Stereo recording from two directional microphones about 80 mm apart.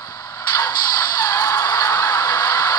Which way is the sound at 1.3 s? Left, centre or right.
Left.